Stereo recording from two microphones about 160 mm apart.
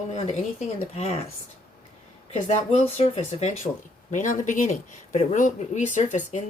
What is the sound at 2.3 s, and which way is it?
Speech, 45° left (ahead or behind).